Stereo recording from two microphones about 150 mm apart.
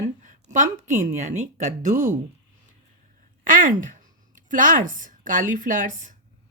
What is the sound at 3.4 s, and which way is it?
Speech, 60° right (ahead or behind).